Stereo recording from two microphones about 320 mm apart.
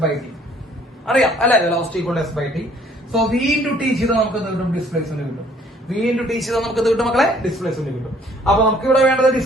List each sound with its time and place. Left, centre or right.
0.0 s a man's voice: centre